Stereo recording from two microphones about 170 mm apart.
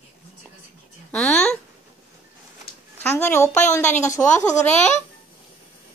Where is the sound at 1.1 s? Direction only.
5° left (ahead or behind).